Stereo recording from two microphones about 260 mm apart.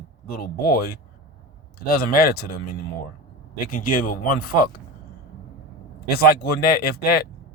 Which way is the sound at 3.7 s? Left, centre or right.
Left.